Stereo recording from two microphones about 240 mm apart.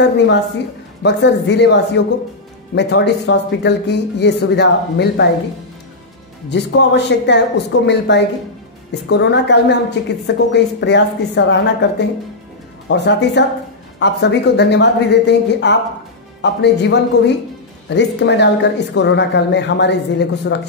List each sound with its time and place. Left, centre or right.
1.0 s a woman's voice: left
6.5 s a woman's voice: left